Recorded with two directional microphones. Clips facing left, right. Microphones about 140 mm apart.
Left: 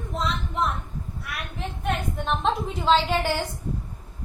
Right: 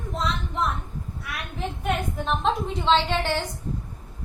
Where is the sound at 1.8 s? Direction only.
Centre (ahead or behind).